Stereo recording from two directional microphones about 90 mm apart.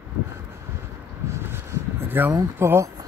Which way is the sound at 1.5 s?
25° right (ahead or behind).